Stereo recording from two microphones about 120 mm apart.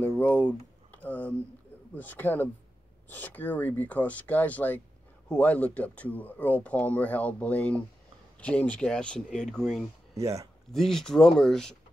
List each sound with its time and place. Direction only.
0.0 s speech: 15° left (ahead or behind)
10.1 s speech: 25° right (ahead or behind)
10.7 s speech: 5° left (ahead or behind)